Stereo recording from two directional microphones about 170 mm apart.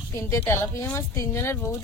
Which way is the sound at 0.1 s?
15° left (ahead or behind).